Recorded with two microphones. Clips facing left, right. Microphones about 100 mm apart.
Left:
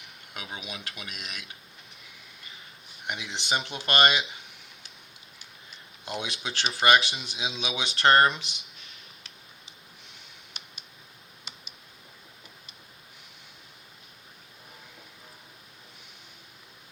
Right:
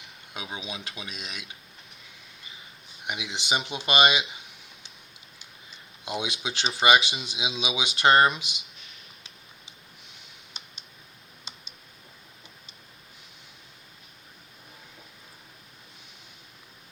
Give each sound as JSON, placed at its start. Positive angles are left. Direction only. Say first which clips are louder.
{"t": 0.5, "sound": "speech", "louder": "right 2 dB", "side_deg": -20}
{"t": 3.1, "sound": "speech", "louder": "right 1 dB", "side_deg": -15}
{"t": 6.1, "sound": "speech", "louder": "right 2 dB", "side_deg": -15}